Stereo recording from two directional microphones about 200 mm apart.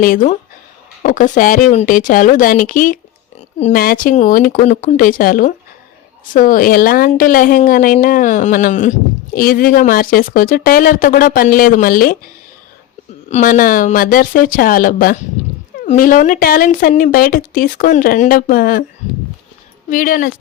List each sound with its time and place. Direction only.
0.0 s a woman's voice: 40° left (ahead or behind)
13.3 s a woman's voice: 45° left (ahead or behind)
19.9 s a woman's voice: 45° left (ahead or behind)